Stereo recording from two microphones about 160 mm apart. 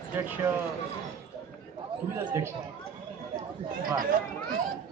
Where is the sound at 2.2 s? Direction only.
20° right (ahead or behind).